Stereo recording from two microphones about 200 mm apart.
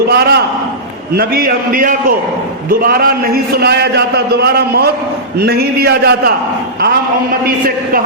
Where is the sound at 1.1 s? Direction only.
50° right (ahead or behind).